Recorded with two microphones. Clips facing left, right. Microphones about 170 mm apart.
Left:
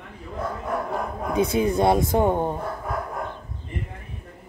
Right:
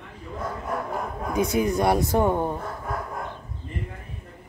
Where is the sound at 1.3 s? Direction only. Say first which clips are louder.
Left 2 dB; 30° left (ahead or behind).